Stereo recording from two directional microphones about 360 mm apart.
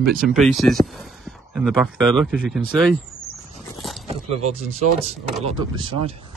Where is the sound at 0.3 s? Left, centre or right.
Centre.